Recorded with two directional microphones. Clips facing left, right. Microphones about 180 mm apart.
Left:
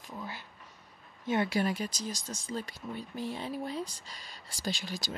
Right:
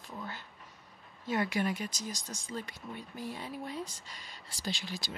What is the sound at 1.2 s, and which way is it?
Speech, 25° left (ahead or behind).